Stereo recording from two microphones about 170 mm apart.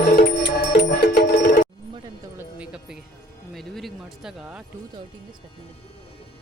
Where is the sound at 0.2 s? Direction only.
75° left (ahead or behind).